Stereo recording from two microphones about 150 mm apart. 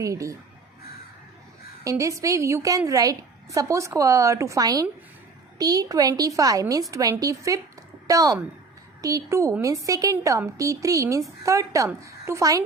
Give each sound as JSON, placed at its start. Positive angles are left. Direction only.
{"t": 0.0, "sound": "a woman's voice", "side_deg": -20}
{"t": 1.8, "sound": "a woman's voice", "side_deg": -20}